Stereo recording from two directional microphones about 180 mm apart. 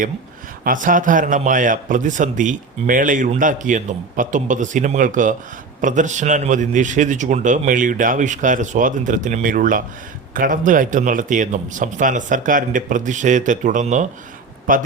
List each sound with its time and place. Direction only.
0.6 s a man's voice: 50° right (ahead or behind)